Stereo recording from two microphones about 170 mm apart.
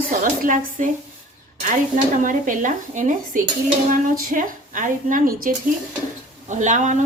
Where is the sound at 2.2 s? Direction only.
50° right (ahead or behind).